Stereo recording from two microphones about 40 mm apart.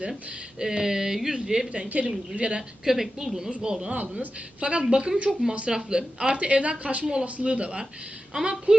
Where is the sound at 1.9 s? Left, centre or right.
Right.